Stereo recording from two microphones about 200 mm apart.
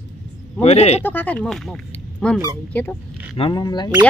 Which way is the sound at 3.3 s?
25° left (ahead or behind).